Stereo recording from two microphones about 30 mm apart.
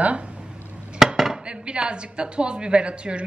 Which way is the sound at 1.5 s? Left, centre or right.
Right.